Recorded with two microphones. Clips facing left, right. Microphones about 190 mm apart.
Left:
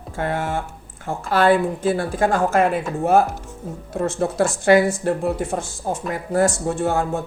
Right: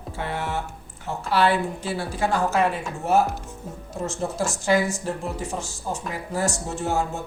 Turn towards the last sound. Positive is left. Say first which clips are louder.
# left 5 dB
turn(degrees=55)  # may be behind; listen again after turning